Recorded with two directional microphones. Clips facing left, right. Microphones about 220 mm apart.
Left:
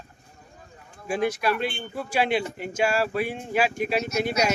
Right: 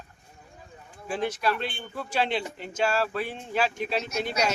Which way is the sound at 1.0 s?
10° left (ahead or behind).